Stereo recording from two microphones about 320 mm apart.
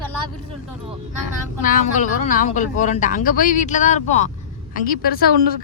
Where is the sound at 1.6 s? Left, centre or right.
Left.